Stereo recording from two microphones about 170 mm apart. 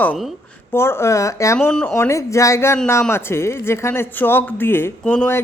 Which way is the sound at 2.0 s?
15° left (ahead or behind).